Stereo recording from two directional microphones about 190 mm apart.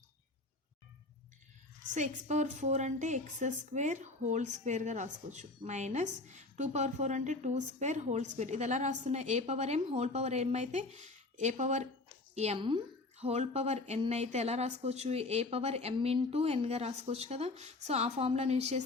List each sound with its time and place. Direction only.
1.9 s a woman's voice: 40° right (ahead or behind)